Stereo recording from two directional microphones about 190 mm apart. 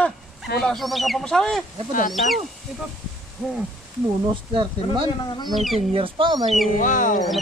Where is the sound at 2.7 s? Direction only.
Centre (ahead or behind).